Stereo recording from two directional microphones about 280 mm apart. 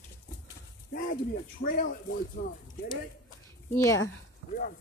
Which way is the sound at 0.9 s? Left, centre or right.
Left.